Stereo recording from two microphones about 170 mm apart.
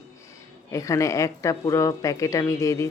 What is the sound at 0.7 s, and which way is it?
A woman's voice, 20° left (ahead or behind).